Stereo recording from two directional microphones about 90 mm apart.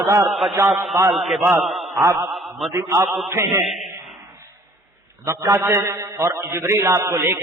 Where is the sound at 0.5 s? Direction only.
35° right (ahead or behind).